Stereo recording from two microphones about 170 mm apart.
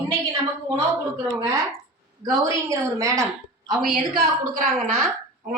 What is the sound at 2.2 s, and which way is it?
Speech, 20° right (ahead or behind).